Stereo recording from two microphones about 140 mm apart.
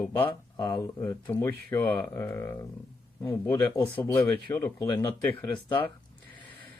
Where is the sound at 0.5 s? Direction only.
30° left (ahead or behind).